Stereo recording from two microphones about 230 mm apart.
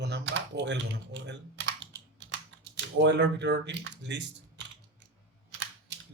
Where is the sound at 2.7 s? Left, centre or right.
Right.